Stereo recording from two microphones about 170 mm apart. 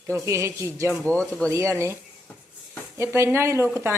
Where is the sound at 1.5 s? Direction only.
15° right (ahead or behind).